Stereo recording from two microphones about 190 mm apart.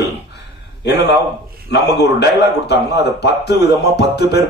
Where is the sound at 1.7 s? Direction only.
60° left (ahead or behind).